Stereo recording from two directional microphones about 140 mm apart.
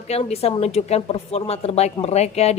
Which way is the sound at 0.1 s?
50° left (ahead or behind).